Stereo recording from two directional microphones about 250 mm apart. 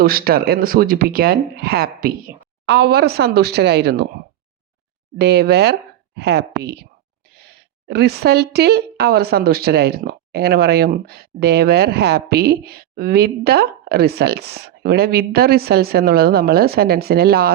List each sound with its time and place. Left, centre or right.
0.0 s a woman's voice: right
5.1 s a woman's voice: right